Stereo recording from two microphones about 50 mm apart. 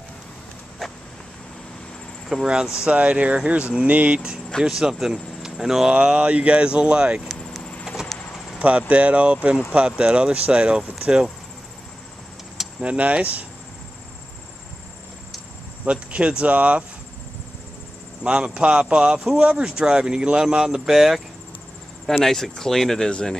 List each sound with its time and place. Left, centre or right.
2.4 s speech: centre
2.9 s speech: right
4.6 s speech: centre
5.9 s speech: right
7.8 s a sound: centre
8.5 s speech: right
12.8 s speech: right
15.8 s speech: right
18.2 s speech: centre
22.2 s speech: centre